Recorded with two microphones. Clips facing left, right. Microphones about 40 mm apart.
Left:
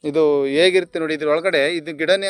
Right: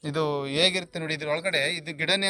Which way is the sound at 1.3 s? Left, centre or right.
Left.